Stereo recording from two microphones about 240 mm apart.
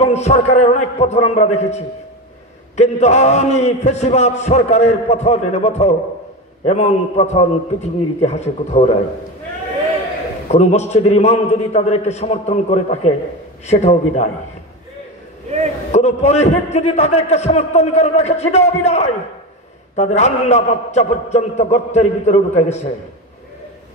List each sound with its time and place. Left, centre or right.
0.0 s a man's voice: left
10.5 s a man's voice: left
15.9 s a man's voice: left